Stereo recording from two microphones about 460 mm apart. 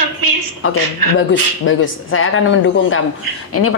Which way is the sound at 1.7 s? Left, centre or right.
Left.